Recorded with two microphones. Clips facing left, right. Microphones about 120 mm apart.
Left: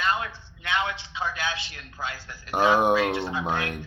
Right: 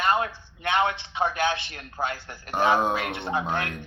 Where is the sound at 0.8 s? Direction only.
55° right (ahead or behind).